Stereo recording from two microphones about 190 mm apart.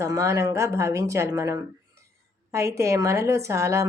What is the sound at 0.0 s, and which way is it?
Speech, 15° right (ahead or behind).